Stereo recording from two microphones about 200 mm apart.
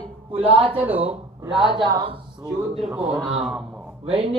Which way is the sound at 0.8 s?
10° right (ahead or behind).